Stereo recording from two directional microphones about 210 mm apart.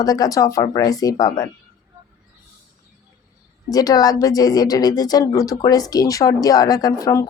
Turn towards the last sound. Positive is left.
turn(degrees=15)  # may be behind; listen again after turning